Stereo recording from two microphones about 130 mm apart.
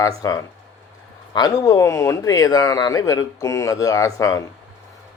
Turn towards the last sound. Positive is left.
turn(degrees=25)  # may be behind; listen again after turning